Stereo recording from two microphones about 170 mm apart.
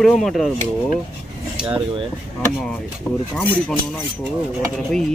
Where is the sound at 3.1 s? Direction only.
10° left (ahead or behind).